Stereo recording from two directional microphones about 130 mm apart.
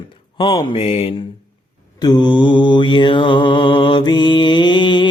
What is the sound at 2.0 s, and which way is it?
Mantra, 35° left (ahead or behind).